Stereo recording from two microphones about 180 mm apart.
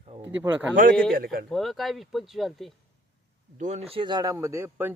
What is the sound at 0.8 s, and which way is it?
Speech, 55° right (ahead or behind).